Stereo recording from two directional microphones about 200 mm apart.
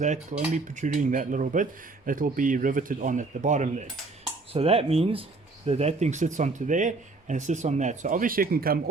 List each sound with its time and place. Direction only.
0.0 s speech: 35° right (ahead or behind)